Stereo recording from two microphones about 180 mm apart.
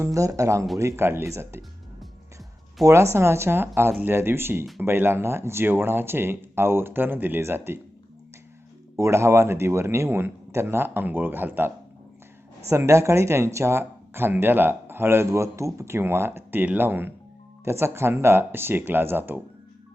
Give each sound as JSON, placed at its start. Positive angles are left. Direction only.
{"t": 0.0, "sound": "speech", "side_deg": -20}
{"t": 2.8, "sound": "speech", "side_deg": -15}
{"t": 9.0, "sound": "speech", "side_deg": -15}
{"t": 12.7, "sound": "speech", "side_deg": -15}